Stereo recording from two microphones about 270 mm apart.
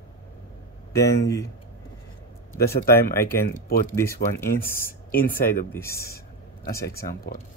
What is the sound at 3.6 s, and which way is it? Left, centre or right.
Speech, left.